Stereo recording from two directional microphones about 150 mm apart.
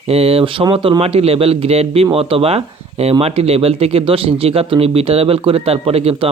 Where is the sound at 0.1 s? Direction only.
40° right (ahead or behind).